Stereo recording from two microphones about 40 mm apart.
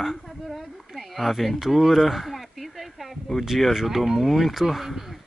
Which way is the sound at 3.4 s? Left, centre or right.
Centre.